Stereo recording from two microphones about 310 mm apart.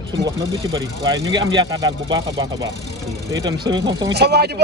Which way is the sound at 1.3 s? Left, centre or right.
Centre.